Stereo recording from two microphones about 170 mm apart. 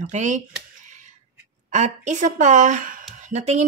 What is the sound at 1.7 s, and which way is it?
A woman's voice, 45° right (ahead or behind).